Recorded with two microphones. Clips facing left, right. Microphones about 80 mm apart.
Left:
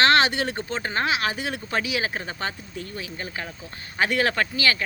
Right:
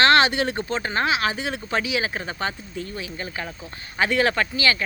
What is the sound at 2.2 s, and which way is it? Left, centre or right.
Speech, right.